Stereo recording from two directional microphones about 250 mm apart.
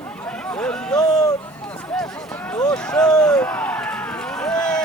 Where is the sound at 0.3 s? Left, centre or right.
Centre.